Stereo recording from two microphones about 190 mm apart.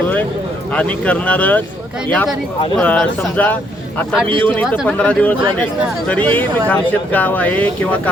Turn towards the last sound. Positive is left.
turn(degrees=10)  # may be behind; listen again after turning